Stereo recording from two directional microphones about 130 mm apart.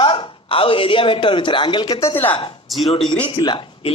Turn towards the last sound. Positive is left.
turn(degrees=40)  # may be behind; listen again after turning